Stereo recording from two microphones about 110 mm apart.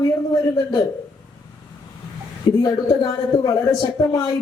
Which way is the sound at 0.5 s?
40° left (ahead or behind).